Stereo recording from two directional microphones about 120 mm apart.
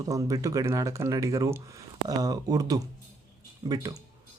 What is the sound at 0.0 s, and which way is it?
Speech, 30° right (ahead or behind).